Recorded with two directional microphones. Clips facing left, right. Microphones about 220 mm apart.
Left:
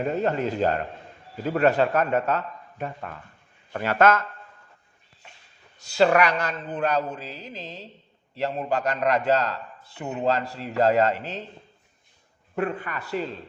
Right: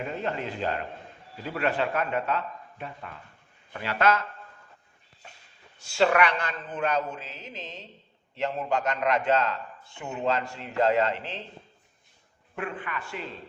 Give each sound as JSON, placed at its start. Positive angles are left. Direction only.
{"t": 0.0, "sound": "speech", "side_deg": 40}
{"t": 5.8, "sound": "a man's voice", "side_deg": 40}
{"t": 12.5, "sound": "a man's voice", "side_deg": 40}